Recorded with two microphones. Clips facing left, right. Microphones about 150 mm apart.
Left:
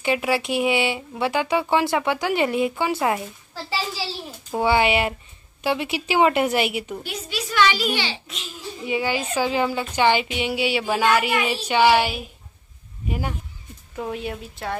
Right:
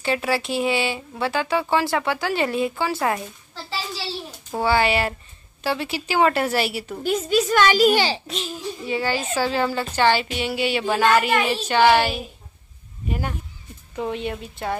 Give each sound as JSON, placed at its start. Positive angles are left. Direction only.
{"t": 0.0, "sound": "speech", "side_deg": 15}
{"t": 3.9, "sound": "a woman's voice", "side_deg": 10}
{"t": 4.6, "sound": "a woman's voice", "side_deg": 20}
{"t": 7.0, "sound": "a child's voice", "side_deg": -45}
{"t": 8.8, "sound": "a woman's voice", "side_deg": 15}
{"t": 13.9, "sound": "speech", "side_deg": 5}